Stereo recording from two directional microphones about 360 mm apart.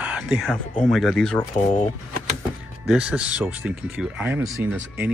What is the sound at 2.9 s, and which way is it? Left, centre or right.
Speech, centre.